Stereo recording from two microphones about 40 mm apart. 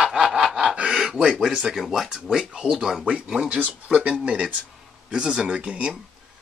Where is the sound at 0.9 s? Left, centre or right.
Centre.